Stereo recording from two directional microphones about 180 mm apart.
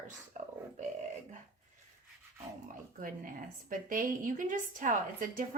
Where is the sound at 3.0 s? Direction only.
50° right (ahead or behind).